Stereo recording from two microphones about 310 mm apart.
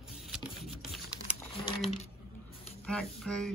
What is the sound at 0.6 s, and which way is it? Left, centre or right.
Typing, centre.